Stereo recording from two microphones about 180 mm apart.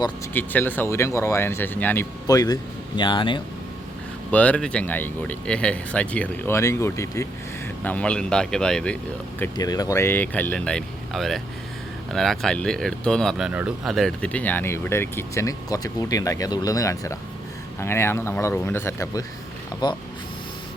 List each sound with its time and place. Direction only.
0.3 s speech: 10° left (ahead or behind); by 3.4 s 25° left (ahead or behind)
4.3 s speech: 5° left (ahead or behind)
9.4 s speech: 20° left (ahead or behind)